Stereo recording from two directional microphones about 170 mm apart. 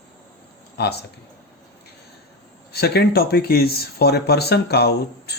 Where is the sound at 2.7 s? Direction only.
70° left (ahead or behind).